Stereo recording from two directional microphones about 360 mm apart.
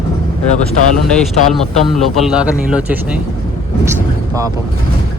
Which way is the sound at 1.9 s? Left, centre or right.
Centre.